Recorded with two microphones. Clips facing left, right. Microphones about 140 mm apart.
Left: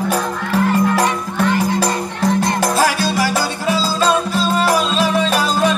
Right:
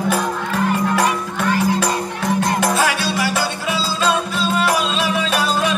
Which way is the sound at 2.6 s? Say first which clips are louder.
Left 2 dB; 40° left (ahead or behind).